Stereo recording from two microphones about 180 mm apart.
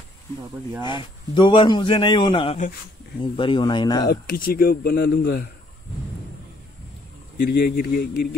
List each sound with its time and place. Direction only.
0.8 s a man's voice: 25° left (ahead or behind)
4.1 s speech: 60° left (ahead or behind)
7.3 s speech: 55° left (ahead or behind)